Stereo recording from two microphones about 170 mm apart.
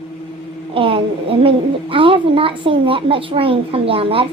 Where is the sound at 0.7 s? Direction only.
30° right (ahead or behind).